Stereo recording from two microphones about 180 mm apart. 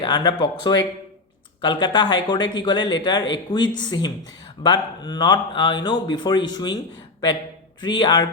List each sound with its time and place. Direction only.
0.0 s speech: 25° left (ahead or behind)